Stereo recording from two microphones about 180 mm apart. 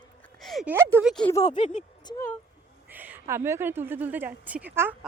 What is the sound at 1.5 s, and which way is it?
Speech, 40° left (ahead or behind).